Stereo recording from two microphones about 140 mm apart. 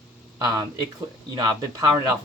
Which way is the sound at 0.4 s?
30° right (ahead or behind).